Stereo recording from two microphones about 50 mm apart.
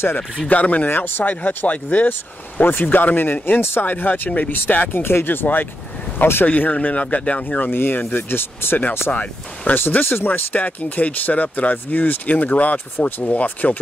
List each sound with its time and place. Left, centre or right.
0.5 s speech: left
0.8 s speech: left
2.6 s speech: left
5.0 s speech: left
6.4 s speech: left
7.7 s speech: left
9.1 s speech: left
9.8 s speech: left